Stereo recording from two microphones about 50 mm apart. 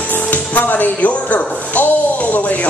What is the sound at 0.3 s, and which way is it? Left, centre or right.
Speech, left.